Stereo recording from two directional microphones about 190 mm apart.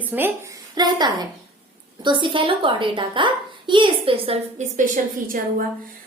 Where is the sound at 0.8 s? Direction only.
20° right (ahead or behind).